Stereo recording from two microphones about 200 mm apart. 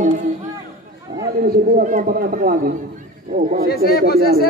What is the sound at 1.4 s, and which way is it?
Speech, 40° right (ahead or behind).